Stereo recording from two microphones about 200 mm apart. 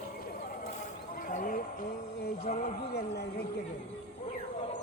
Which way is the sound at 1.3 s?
40° left (ahead or behind).